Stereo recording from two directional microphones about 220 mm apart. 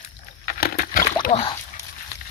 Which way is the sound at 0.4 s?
45° left (ahead or behind).